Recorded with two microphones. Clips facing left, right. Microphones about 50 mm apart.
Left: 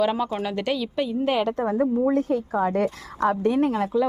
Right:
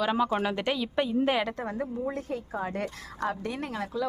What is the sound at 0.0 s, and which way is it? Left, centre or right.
Speech, centre.